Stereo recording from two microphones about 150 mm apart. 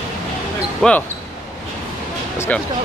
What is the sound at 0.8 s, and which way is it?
Speech, 10° left (ahead or behind).